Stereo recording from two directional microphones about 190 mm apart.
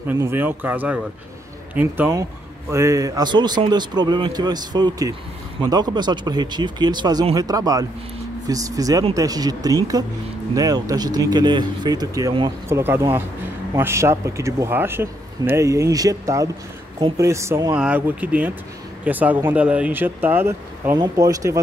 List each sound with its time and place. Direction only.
0.1 s speech: 10° right (ahead or behind)
17.7 s speech: 5° right (ahead or behind)